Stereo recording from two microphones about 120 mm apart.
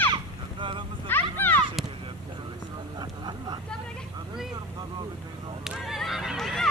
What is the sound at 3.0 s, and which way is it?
Vehicle, 40° right (ahead or behind).